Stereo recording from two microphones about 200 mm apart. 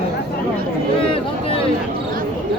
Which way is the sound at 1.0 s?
25° left (ahead or behind).